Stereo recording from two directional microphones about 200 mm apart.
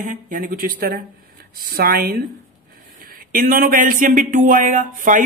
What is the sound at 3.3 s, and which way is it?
Speech, 45° right (ahead or behind).